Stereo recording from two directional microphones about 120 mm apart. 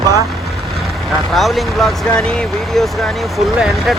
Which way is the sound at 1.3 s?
Centre (ahead or behind).